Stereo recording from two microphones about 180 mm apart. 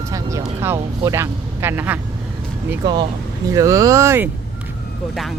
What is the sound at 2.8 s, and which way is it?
Speech, 25° right (ahead or behind).